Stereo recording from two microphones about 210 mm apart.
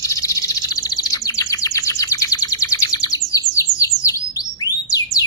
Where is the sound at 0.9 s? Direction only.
15° left (ahead or behind).